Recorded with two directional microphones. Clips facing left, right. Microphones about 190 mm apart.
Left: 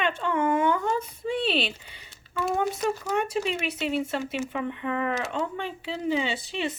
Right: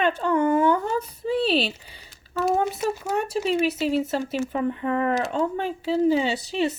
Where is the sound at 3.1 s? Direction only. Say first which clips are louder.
Right 3 dB; 35° right (ahead or behind).